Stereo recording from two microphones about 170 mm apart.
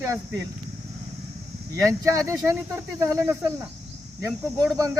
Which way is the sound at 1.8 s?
20° right (ahead or behind).